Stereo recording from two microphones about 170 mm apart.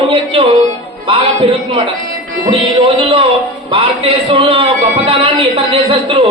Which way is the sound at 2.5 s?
Centre (ahead or behind).